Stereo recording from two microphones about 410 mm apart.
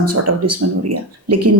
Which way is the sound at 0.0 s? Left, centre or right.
Right.